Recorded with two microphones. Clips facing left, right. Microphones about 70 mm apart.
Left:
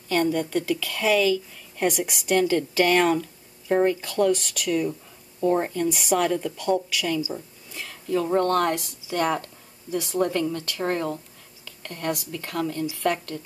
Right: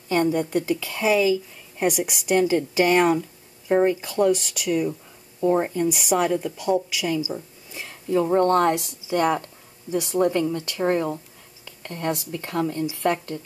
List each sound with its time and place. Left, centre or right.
0.1 s a woman's voice: centre